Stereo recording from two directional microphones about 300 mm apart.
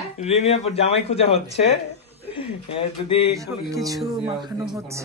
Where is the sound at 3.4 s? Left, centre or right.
Centre.